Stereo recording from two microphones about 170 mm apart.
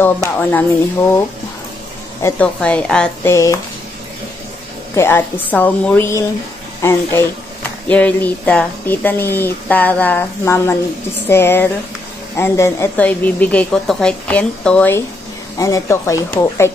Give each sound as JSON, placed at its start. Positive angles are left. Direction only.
{"t": 0.0, "sound": "speech", "side_deg": 10}
{"t": 2.2, "sound": "speech", "side_deg": 10}
{"t": 4.9, "sound": "speech", "side_deg": 15}